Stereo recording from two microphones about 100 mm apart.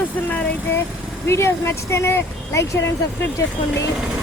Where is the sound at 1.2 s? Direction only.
25° left (ahead or behind).